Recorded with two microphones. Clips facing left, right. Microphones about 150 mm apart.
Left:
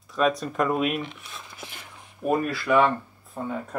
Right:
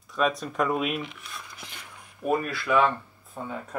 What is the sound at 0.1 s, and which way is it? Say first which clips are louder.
Speech: left 3 dB; centre (ahead or behind).